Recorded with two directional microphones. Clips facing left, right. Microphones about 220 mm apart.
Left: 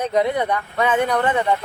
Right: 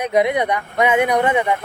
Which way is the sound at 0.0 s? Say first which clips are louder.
Right 2 dB; 15° right (ahead or behind).